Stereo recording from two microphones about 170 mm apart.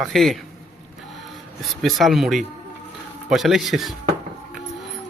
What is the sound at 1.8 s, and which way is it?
Speech, centre (ahead or behind).